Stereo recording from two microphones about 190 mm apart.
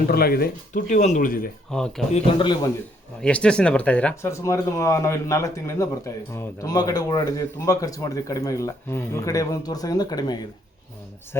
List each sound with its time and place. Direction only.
0.1 s speech: 55° left (ahead or behind)
1.7 s speech: 5° left (ahead or behind)
2.1 s a man's voice: 25° left (ahead or behind)
3.2 s speech: 5° left (ahead or behind)